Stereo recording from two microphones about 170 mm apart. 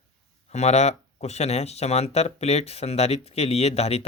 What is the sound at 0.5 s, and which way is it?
Speech, 40° left (ahead or behind).